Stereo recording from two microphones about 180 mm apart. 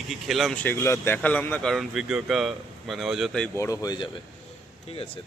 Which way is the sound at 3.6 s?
20° left (ahead or behind).